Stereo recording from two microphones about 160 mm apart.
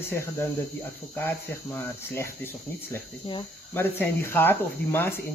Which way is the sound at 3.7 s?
15° left (ahead or behind).